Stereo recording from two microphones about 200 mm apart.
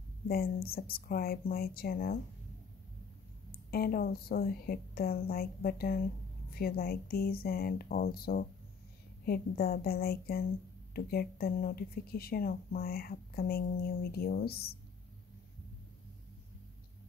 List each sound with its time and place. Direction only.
0.3 s a woman's voice: 50° left (ahead or behind)
3.7 s a woman's voice: 50° left (ahead or behind)